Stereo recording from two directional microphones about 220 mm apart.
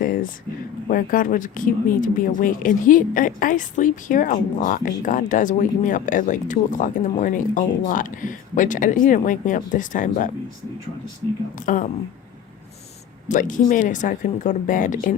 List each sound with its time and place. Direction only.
0.0 s a sound: 40° left (ahead or behind)
0.9 s speech: 40° left (ahead or behind)
11.5 s speech: 35° left (ahead or behind)
13.2 s speech: 35° left (ahead or behind)